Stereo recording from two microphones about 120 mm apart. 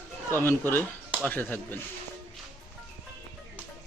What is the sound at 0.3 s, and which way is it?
Speech, 20° left (ahead or behind).